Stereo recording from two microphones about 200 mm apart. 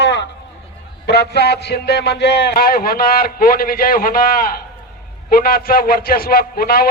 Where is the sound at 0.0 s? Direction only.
60° left (ahead or behind).